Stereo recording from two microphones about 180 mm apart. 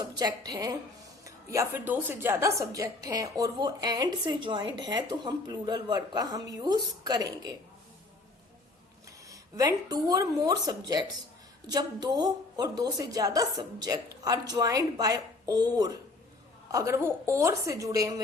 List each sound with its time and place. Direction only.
0.0 s a woman's voice: 20° right (ahead or behind)
9.0 s a woman's voice: 20° right (ahead or behind)